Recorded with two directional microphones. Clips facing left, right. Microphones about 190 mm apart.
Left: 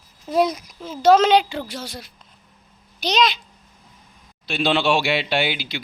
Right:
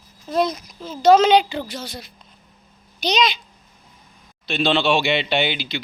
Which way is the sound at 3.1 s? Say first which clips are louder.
Even; centre (ahead or behind).